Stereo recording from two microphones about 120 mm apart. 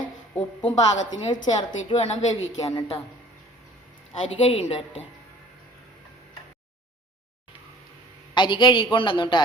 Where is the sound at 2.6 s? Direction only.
30° left (ahead or behind).